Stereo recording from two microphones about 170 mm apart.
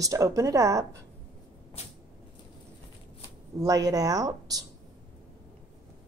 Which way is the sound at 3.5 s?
20° right (ahead or behind).